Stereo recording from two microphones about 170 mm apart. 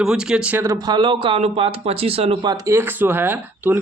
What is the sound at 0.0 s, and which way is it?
Speech, 5° right (ahead or behind).